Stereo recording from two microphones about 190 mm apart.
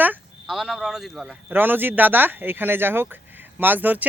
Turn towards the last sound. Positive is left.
turn(degrees=-10)  # may be behind; listen again after turning